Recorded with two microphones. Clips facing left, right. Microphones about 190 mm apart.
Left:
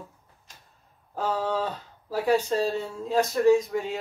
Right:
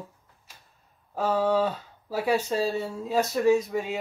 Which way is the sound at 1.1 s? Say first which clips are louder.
Right 4 dB; 5° right (ahead or behind).